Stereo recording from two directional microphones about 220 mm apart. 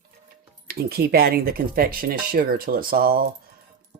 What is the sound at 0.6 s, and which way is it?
Speech, 45° right (ahead or behind).